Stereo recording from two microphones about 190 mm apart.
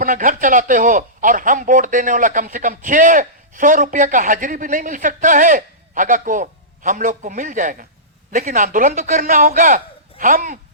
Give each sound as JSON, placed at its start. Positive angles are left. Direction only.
{"t": 0.0, "sound": "speech", "side_deg": -45}